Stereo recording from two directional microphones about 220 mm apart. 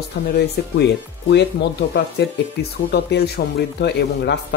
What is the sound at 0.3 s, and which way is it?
Speech, 50° left (ahead or behind).